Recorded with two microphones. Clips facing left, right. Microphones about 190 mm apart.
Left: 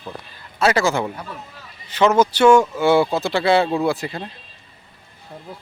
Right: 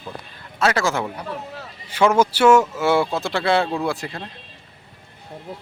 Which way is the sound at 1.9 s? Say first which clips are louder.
Left 1 dB; 10° right (ahead or behind).